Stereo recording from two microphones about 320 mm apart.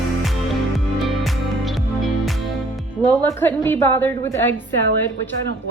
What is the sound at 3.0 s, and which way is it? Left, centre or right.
A woman's voice, centre.